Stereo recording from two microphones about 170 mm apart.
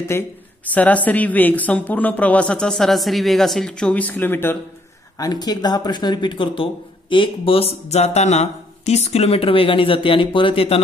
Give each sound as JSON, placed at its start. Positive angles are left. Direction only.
{"t": 0.7, "sound": "speech", "side_deg": 10}
{"t": 5.2, "sound": "speech", "side_deg": 25}